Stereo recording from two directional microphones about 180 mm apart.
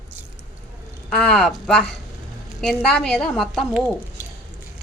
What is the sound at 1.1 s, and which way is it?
Speech, 5° left (ahead or behind).